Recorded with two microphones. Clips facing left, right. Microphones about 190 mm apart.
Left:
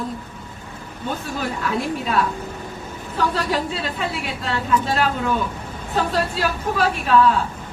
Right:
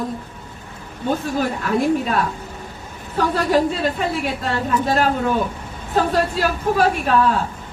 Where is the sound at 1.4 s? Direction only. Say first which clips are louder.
Right 2 dB; 45° right (ahead or behind).